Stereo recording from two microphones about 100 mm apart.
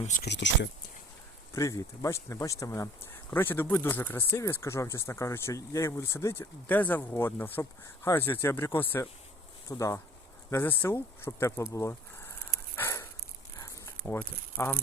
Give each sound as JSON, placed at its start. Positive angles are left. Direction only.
{"t": 1.5, "sound": "speech", "side_deg": 35}
{"t": 6.7, "sound": "speech", "side_deg": 15}
{"t": 9.6, "sound": "speech", "side_deg": 35}
{"t": 10.5, "sound": "speech", "side_deg": 20}
{"t": 13.6, "sound": "a sound", "side_deg": 30}
{"t": 14.0, "sound": "speech", "side_deg": 15}